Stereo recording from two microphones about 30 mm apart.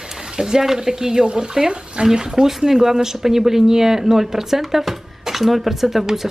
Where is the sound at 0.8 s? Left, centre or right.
Centre.